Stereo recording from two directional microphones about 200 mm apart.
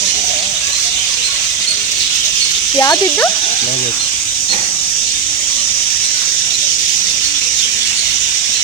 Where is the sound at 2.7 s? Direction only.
15° left (ahead or behind).